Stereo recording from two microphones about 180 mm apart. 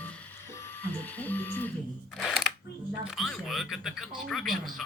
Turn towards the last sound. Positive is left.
turn(degrees=0)  # may be behind; listen again after turning